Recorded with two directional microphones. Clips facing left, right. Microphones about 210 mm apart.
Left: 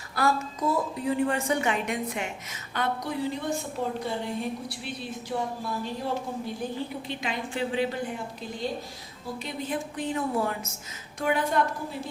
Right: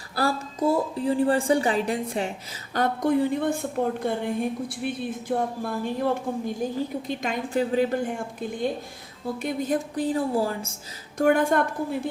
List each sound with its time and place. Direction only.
0.2 s a woman's voice: 30° right (ahead or behind)
11.2 s a woman's voice: 45° right (ahead or behind)